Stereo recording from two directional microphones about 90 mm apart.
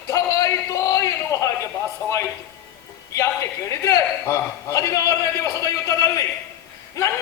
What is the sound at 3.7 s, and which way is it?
A man's voice, 35° left (ahead or behind).